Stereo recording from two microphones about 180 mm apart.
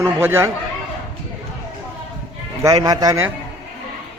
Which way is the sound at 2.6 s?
20° right (ahead or behind).